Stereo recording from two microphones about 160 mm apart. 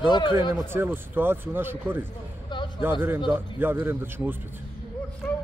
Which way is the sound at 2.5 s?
30° left (ahead or behind).